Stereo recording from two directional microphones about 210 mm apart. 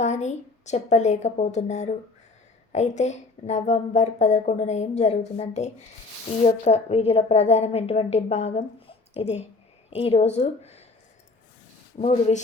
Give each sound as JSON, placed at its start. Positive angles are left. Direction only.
{"t": 0.0, "sound": "a woman's voice", "side_deg": 35}
{"t": 11.9, "sound": "speech", "side_deg": 30}